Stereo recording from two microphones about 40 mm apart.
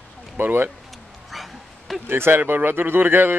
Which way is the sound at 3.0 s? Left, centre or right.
Right.